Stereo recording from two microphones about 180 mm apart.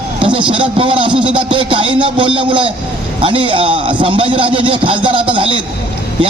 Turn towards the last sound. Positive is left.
turn(degrees=-30)  # may be behind; listen again after turning